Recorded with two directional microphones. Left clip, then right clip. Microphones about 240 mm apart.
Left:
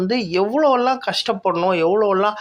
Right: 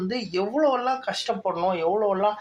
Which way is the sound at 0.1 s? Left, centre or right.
Left.